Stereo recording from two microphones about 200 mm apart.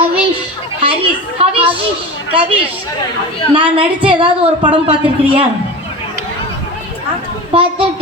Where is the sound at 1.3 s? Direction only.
30° right (ahead or behind).